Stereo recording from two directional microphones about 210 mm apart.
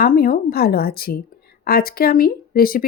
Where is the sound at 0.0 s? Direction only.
45° left (ahead or behind).